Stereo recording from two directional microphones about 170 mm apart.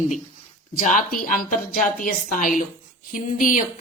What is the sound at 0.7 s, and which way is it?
Speech, 50° left (ahead or behind).